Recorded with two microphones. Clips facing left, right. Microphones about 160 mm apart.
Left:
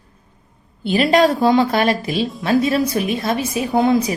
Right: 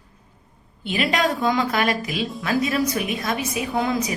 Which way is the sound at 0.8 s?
35° left (ahead or behind).